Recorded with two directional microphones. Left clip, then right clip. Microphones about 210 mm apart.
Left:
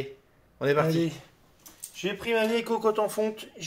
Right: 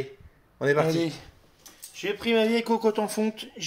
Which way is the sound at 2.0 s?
45° right (ahead or behind).